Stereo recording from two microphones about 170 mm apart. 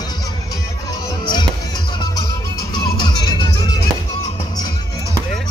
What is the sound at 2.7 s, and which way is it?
Music, 25° left (ahead or behind).